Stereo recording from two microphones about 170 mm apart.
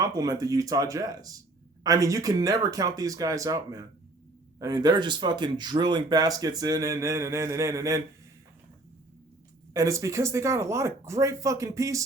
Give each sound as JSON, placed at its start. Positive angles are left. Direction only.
{"t": 0.0, "sound": "speech", "side_deg": -20}
{"t": 9.7, "sound": "speech", "side_deg": -20}